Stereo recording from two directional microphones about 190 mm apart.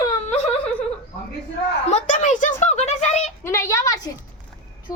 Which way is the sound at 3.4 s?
15° left (ahead or behind).